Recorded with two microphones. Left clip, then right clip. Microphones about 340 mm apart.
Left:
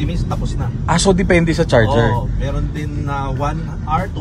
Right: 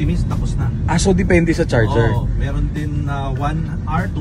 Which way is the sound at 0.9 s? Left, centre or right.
Left.